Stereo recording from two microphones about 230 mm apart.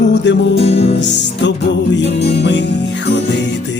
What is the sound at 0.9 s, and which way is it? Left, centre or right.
Music, left.